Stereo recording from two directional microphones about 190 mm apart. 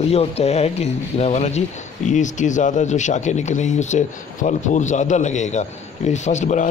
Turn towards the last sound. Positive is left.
turn(degrees=40)  # may be behind; listen again after turning